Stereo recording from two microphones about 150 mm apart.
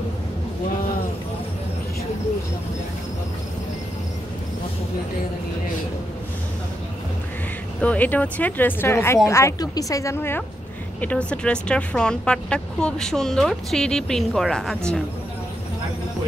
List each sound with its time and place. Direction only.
7.8 s speech: 10° left (ahead or behind)